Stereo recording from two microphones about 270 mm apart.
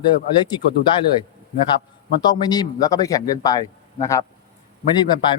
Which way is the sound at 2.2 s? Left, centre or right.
Centre.